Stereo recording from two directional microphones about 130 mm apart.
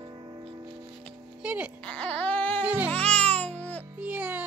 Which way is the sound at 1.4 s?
10° right (ahead or behind).